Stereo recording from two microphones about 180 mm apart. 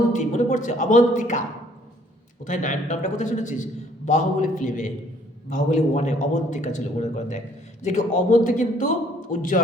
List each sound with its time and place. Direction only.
0.1 s a man's voice: 40° left (ahead or behind)
2.4 s a man's voice: 45° left (ahead or behind)